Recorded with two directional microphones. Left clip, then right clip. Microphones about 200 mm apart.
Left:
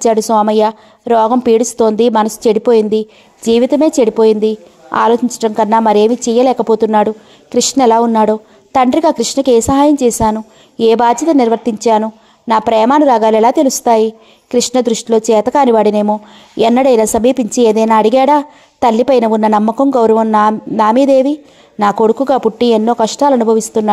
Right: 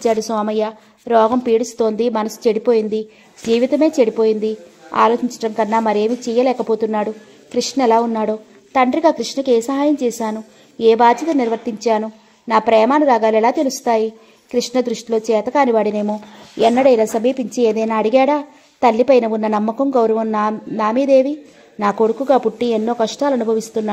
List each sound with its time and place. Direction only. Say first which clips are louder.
0.0 s a woman's voice: left 7 dB; 40° left (ahead or behind)